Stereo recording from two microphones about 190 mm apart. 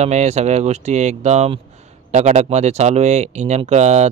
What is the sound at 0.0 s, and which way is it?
Speech, 35° right (ahead or behind).